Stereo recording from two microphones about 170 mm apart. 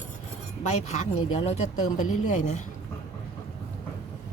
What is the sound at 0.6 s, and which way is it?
Speech, 45° left (ahead or behind).